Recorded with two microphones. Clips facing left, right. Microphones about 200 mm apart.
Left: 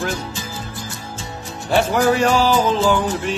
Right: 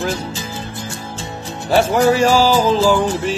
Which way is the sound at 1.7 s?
Centre (ahead or behind).